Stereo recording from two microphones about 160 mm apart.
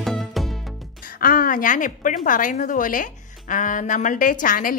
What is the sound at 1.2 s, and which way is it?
A woman's voice, 60° left (ahead or behind).